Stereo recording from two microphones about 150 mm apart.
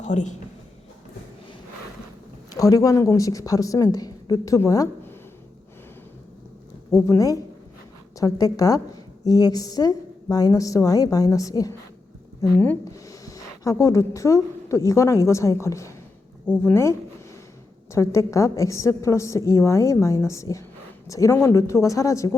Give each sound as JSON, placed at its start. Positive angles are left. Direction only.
{"t": 0.0, "sound": "a woman's voice", "side_deg": 55}
{"t": 2.5, "sound": "a woman's voice", "side_deg": 25}
{"t": 6.9, "sound": "a woman's voice", "side_deg": 20}